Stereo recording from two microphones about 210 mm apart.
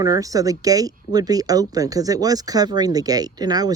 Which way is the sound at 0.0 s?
15° right (ahead or behind).